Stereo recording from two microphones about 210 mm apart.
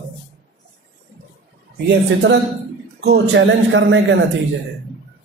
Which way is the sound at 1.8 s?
55° right (ahead or behind).